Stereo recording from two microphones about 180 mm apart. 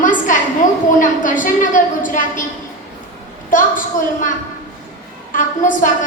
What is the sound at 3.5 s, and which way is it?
Speech, 45° left (ahead or behind).